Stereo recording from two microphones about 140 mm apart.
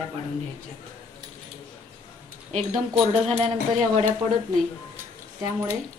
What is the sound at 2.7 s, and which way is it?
Speech, 45° right (ahead or behind).